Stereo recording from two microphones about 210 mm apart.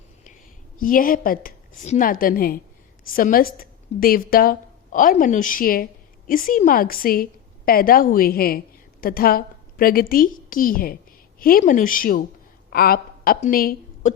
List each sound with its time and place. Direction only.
0.8 s a woman's voice: 40° left (ahead or behind)